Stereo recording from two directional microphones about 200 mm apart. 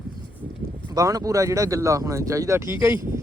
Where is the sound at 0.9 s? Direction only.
15° right (ahead or behind).